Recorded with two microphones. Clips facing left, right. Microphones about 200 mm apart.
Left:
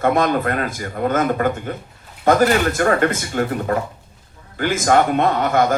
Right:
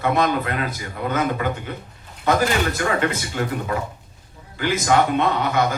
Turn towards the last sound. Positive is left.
turn(degrees=50)  # may be behind; listen again after turning